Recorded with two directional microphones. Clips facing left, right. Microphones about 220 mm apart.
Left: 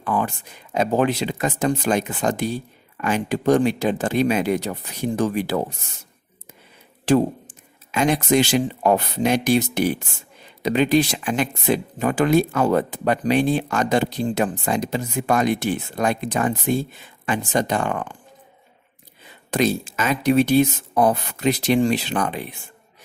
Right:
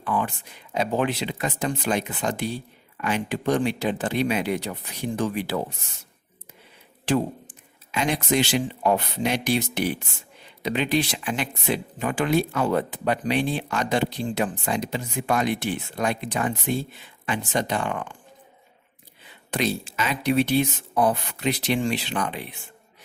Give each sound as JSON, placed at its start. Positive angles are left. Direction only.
{"t": 0.0, "sound": "speech", "side_deg": 45}
{"t": 7.1, "sound": "speech", "side_deg": 40}
{"t": 19.5, "sound": "speech", "side_deg": 45}